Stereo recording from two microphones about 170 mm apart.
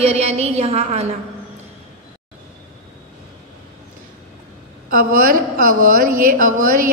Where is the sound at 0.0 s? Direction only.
35° right (ahead or behind).